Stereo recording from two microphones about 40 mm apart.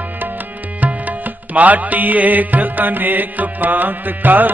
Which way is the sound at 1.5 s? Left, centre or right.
Right.